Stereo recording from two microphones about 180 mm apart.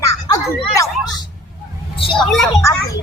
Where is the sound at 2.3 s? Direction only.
Centre (ahead or behind).